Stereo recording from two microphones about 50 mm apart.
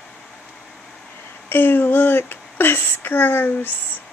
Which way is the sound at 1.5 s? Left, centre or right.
Left.